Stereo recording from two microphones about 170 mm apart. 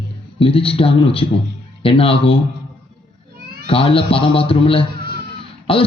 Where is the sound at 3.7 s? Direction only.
30° left (ahead or behind).